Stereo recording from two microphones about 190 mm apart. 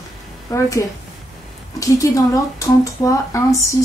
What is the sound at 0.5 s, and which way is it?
Speech, 15° left (ahead or behind).